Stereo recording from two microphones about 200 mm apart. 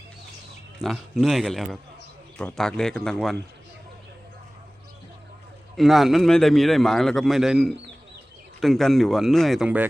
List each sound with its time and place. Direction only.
0.8 s a man's voice: centre (ahead or behind)
5.7 s a man's voice: centre (ahead or behind)